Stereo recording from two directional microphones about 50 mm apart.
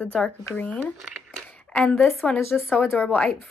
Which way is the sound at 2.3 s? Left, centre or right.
Left.